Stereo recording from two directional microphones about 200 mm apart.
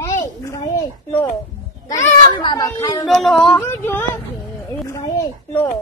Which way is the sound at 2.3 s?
20° left (ahead or behind).